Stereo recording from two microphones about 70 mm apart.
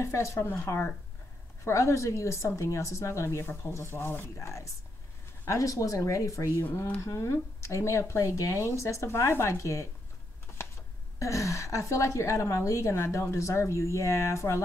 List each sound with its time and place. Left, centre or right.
0.0 s a woman's voice: left
4.4 s a woman's voice: left
6.6 s a woman's voice: left
11.1 s a woman's voice: left